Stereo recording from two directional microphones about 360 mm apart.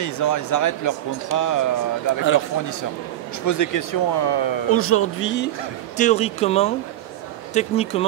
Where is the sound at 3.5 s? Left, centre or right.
Left.